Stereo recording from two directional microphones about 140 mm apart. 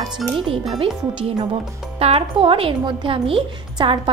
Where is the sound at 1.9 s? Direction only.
45° right (ahead or behind).